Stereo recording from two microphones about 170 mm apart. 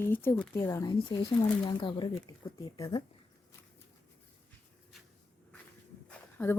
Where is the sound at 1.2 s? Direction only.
30° left (ahead or behind).